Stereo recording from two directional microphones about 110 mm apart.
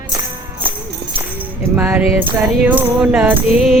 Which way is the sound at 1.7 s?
20° right (ahead or behind).